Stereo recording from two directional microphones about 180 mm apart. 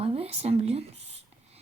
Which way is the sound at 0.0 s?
30° right (ahead or behind).